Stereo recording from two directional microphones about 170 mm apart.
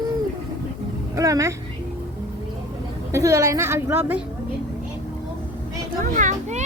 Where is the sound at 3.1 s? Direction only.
20° right (ahead or behind).